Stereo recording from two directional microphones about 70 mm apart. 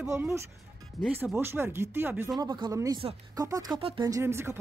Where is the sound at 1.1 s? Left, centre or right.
Right.